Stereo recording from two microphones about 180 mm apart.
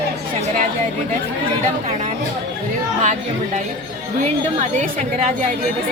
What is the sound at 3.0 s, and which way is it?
Speech, 40° right (ahead or behind).